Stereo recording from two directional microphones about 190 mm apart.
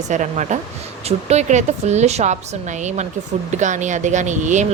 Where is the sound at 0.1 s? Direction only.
40° right (ahead or behind).